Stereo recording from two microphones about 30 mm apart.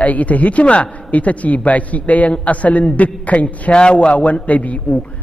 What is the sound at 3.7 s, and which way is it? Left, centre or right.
Speech, left.